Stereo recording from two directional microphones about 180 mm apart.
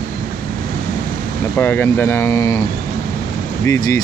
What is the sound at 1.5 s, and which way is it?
Speech, 10° left (ahead or behind).